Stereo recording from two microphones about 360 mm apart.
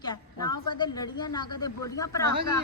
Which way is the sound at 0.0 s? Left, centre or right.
Centre.